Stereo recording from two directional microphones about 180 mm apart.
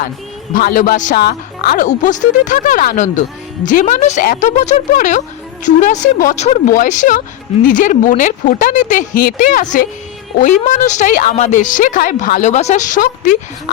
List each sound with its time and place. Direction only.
0.5 s a woman's voice: 50° left (ahead or behind)
1.2 s a woman's voice: 60° left (ahead or behind)